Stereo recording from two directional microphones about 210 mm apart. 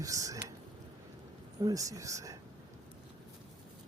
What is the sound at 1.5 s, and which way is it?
Speech, 15° right (ahead or behind).